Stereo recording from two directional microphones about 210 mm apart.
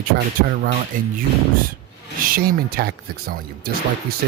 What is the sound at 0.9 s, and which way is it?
Speech, 40° right (ahead or behind).